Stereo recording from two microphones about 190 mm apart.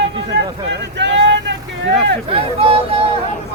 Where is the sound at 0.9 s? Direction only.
65° right (ahead or behind).